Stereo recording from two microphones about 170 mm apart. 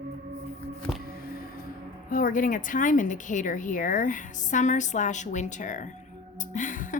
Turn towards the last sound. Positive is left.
turn(degrees=50)  # may be behind; listen again after turning